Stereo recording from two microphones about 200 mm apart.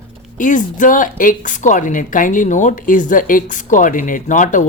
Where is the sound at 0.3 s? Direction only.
40° left (ahead or behind).